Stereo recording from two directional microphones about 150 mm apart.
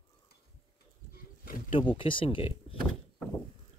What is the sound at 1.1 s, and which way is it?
Insect, 75° left (ahead or behind).